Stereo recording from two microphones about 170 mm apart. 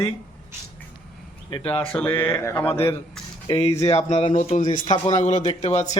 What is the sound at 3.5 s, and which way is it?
Speech, 40° left (ahead or behind).